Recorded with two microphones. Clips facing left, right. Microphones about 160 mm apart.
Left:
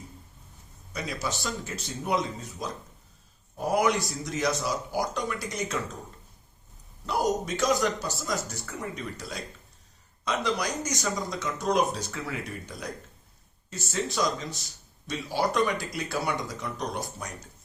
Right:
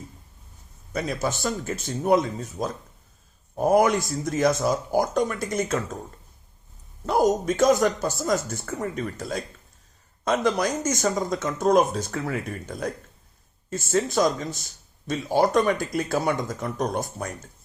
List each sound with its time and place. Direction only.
0.9 s speech: 50° right (ahead or behind)
7.0 s speech: 50° right (ahead or behind)